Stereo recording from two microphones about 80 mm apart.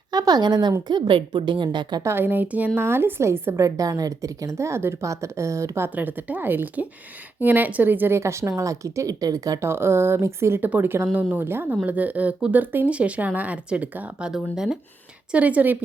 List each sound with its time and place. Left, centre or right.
0.1 s a woman's voice: right
0.9 s a woman's voice: right
2.0 s speech: right
3.6 s a woman's voice: right
5.9 s a woman's voice: right
9.6 s a woman's voice: right; by 14.8 s centre
15.3 s speech: centre